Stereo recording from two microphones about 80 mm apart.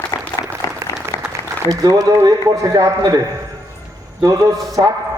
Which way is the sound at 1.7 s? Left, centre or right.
Right.